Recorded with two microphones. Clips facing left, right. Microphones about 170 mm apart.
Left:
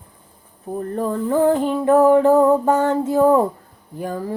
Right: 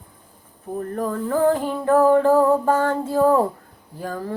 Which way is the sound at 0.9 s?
20° left (ahead or behind).